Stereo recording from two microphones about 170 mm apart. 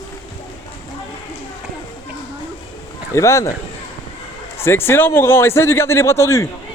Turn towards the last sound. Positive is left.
turn(degrees=15)  # may be behind; listen again after turning